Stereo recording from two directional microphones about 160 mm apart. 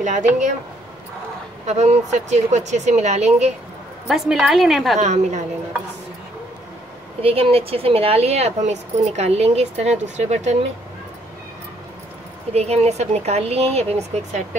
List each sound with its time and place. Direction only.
0.0 s a woman's voice: 50° right (ahead or behind)
1.7 s a woman's voice: 45° right (ahead or behind)
4.1 s a woman's voice: centre (ahead or behind)
4.9 s a woman's voice: 45° right (ahead or behind)
7.2 s speech: 35° right (ahead or behind)
12.5 s speech: 40° right (ahead or behind)